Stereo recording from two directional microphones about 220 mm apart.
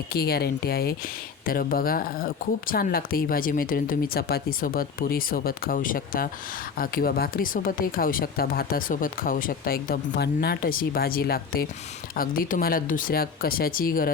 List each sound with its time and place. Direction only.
0.1 s speech: 45° left (ahead or behind)